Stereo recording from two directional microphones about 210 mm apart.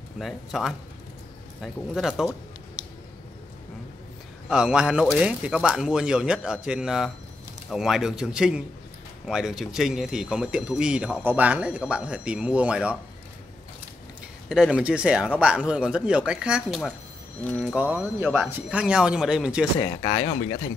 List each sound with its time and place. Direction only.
0.2 s speech: centre (ahead or behind)
4.5 s speech: 5° right (ahead or behind)
14.5 s speech: 5° right (ahead or behind)
19.8 s speech: 20° left (ahead or behind)